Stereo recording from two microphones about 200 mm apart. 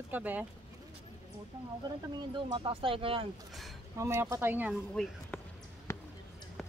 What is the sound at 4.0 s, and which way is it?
Speech, 15° right (ahead or behind).